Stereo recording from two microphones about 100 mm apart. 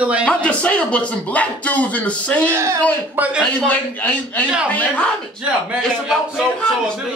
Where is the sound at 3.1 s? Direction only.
15° right (ahead or behind).